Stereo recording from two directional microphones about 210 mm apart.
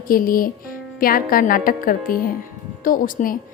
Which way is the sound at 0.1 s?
45° left (ahead or behind).